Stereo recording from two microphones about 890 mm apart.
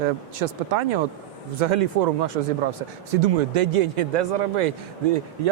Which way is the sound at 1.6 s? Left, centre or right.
Right.